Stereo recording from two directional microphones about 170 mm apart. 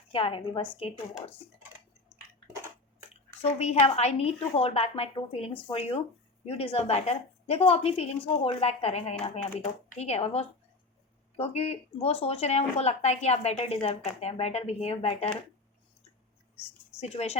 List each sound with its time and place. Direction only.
0.1 s speech: 35° left (ahead or behind)
3.4 s speech: 40° left (ahead or behind)
17.0 s speech: 40° left (ahead or behind)